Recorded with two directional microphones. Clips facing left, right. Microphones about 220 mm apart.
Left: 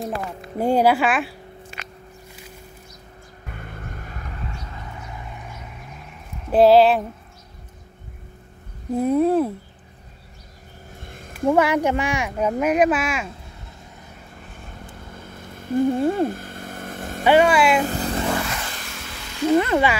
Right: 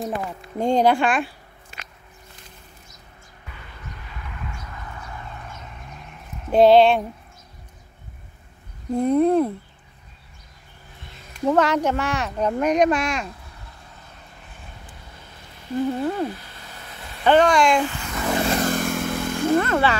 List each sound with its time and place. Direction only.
0.6 s speech: 5° left (ahead or behind)
3.4 s vehicle: 50° left (ahead or behind); by 7.1 s centre (ahead or behind)
8.9 s speech: 5° left (ahead or behind)
11.0 s a sound: 50° left (ahead or behind)
11.4 s speech: 10° left (ahead or behind)
14.9 s vehicle: 50° left (ahead or behind)
17.2 s speech: 10° left (ahead or behind)
17.8 s vehicle: 35° left (ahead or behind)
18.4 s vehicle: 40° right (ahead or behind)
19.6 s speech: 15° left (ahead or behind)